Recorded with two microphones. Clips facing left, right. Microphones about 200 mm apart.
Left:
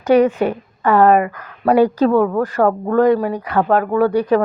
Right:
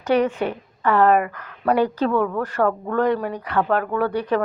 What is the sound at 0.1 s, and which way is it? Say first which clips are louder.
A woman's voice: left 6 dB; 45° left (ahead or behind).